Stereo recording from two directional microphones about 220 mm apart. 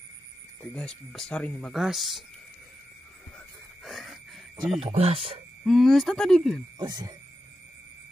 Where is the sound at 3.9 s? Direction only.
Centre (ahead or behind).